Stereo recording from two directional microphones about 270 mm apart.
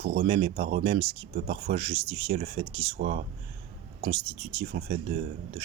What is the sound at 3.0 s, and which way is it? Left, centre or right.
Speech, right.